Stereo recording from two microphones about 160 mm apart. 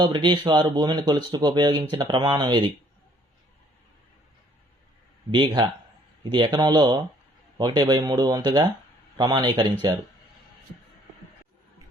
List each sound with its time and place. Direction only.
0.0 s speech: 30° right (ahead or behind)
5.3 s speech: 30° right (ahead or behind)